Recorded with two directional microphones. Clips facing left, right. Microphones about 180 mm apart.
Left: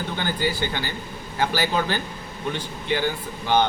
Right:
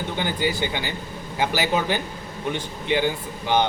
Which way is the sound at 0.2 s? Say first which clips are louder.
Right 1 dB; 15° right (ahead or behind).